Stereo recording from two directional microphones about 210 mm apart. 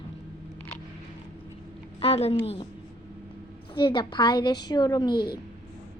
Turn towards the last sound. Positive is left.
turn(degrees=20)  # may be behind; listen again after turning